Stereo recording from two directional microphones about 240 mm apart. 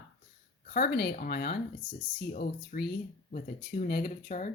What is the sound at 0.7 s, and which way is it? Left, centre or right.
Speech, left.